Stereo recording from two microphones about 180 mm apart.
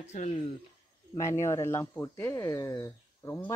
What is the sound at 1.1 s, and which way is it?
Speech, 15° left (ahead or behind).